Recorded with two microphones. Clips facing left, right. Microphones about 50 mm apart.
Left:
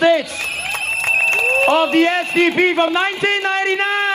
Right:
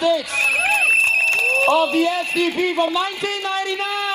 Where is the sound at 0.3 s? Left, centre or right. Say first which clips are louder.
Right 6 dB; right.